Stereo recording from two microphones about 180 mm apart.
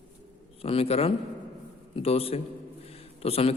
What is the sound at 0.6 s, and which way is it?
A man's voice, 30° left (ahead or behind).